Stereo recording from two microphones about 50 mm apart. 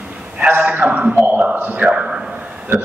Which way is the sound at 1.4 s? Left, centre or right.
Right.